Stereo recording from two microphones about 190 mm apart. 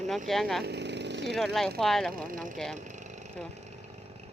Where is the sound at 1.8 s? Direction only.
Centre (ahead or behind).